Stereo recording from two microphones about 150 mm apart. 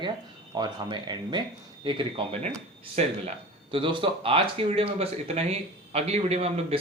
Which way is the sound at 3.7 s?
35° right (ahead or behind).